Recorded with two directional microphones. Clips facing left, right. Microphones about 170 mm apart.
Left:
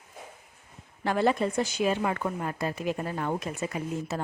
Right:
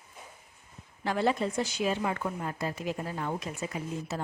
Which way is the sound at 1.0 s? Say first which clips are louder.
Left 3 dB; 55° left (ahead or behind).